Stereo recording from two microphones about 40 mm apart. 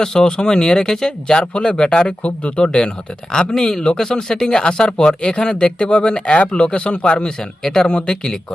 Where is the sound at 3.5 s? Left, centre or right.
Centre.